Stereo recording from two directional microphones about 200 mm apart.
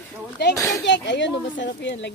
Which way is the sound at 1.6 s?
60° left (ahead or behind).